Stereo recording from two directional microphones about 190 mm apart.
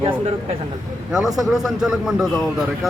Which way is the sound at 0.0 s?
30° right (ahead or behind).